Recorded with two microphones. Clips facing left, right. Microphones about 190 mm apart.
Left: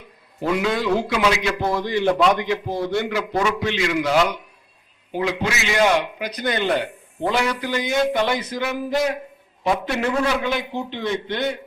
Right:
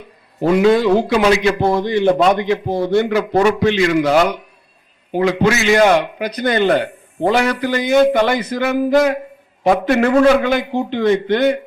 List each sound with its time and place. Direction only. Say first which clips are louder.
0.4 s a man's voice: right 9 dB; 35° right (ahead or behind)
1.8 s a man's voice: right 3 dB; 55° right (ahead or behind)